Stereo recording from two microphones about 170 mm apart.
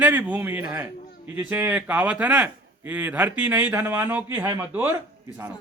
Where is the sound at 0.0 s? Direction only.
10° right (ahead or behind).